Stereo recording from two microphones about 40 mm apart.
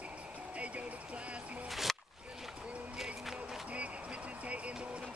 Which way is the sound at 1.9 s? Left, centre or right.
Centre.